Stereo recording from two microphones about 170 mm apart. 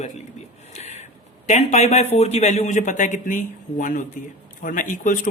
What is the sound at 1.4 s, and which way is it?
Speech, 40° left (ahead or behind).